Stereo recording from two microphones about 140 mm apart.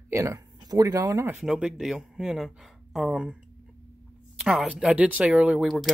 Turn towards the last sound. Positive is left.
turn(degrees=0)  # may be behind; listen again after turning